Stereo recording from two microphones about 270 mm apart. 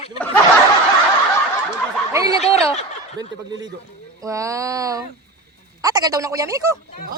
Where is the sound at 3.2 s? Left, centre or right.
Centre.